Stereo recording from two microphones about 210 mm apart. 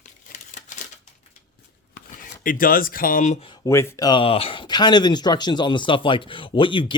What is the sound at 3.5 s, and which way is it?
Speech, 10° left (ahead or behind).